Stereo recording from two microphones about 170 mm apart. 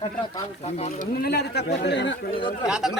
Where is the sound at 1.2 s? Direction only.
70° left (ahead or behind).